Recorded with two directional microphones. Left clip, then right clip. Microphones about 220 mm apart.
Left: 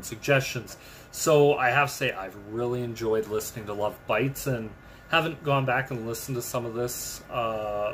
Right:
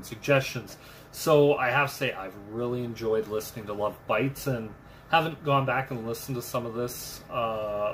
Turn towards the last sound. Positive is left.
turn(degrees=15)  # may be behind; listen again after turning